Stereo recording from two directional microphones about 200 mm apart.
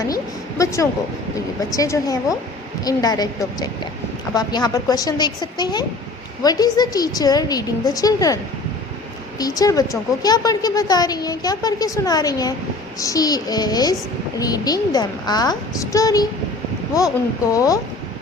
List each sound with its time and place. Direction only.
0.6 s a woman's voice: 15° left (ahead or behind)
9.4 s a woman's voice: 15° left (ahead or behind)